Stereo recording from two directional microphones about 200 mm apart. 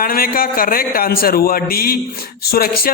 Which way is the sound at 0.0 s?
45° left (ahead or behind).